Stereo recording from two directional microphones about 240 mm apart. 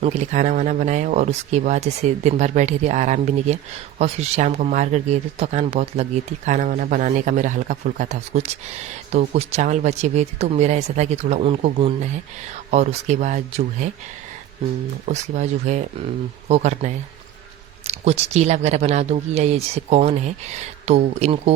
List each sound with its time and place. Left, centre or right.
0.0 s speech: right
15.0 s speech: right